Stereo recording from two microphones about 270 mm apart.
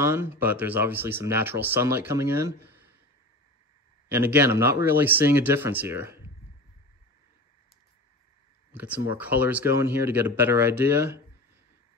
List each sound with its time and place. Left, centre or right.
0.0 s speech: centre
4.1 s speech: centre
8.7 s speech: centre